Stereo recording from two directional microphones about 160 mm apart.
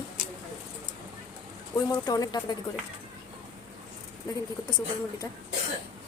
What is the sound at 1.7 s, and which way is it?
Speech, 25° left (ahead or behind).